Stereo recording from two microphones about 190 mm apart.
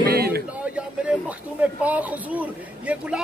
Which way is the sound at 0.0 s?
55° right (ahead or behind).